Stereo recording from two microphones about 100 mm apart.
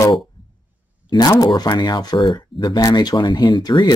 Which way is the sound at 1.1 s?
40° left (ahead or behind).